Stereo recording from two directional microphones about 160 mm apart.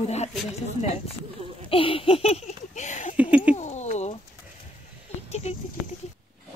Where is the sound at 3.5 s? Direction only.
45° left (ahead or behind).